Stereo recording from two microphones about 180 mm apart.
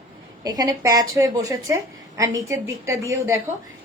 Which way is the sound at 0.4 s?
20° right (ahead or behind).